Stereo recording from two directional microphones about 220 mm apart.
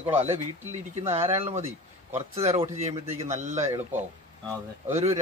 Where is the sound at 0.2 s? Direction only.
30° right (ahead or behind).